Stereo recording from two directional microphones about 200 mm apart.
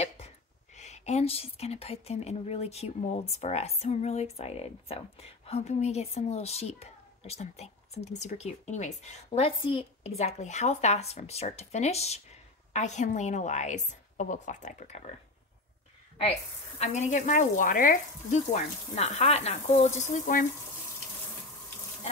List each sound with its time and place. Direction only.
0.7 s a woman's voice: 35° left (ahead or behind)
16.2 s a woman's voice: 30° left (ahead or behind)